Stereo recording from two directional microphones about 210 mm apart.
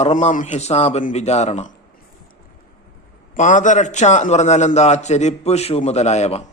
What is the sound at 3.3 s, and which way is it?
Speech, 35° left (ahead or behind).